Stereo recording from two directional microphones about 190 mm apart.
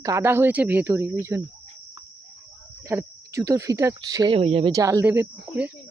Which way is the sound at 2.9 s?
15° right (ahead or behind).